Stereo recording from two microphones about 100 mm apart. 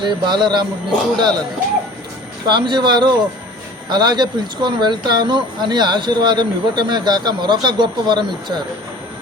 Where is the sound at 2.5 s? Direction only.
50° right (ahead or behind).